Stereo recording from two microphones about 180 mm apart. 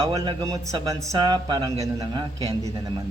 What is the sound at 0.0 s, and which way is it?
Speech, 20° right (ahead or behind).